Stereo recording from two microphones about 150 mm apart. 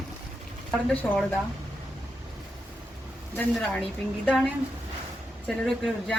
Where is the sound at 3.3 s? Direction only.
5° left (ahead or behind).